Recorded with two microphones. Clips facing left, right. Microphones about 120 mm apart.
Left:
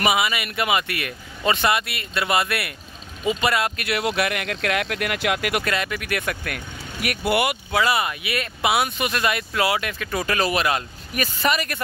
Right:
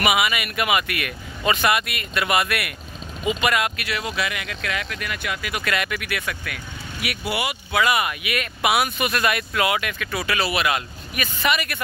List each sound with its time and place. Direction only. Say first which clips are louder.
0.0 s speech: even; 30° left (ahead or behind)
3.7 s speech: left 4 dB; 55° left (ahead or behind); by 5.6 s 70° left (ahead or behind)
5.6 s speech: even; 30° left (ahead or behind)
6.0 s speech: left 3 dB; 50° left (ahead or behind)
7.7 s speech: right 2 dB; 30° left (ahead or behind)